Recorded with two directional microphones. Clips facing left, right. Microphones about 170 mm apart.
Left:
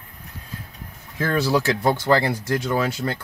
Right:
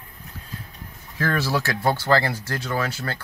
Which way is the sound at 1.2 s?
20° left (ahead or behind).